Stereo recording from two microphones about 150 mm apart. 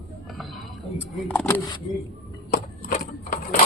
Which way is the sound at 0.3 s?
Centre (ahead or behind).